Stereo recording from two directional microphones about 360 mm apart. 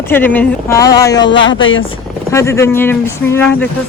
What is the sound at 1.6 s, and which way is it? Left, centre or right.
Speech, left.